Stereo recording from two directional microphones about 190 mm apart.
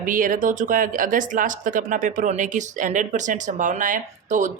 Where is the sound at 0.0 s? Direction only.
45° right (ahead or behind).